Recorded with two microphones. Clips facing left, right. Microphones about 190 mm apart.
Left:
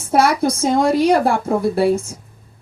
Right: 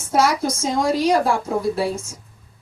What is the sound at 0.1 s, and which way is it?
A woman's voice, 60° left (ahead or behind).